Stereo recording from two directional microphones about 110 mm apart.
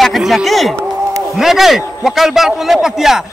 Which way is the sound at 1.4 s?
5° right (ahead or behind).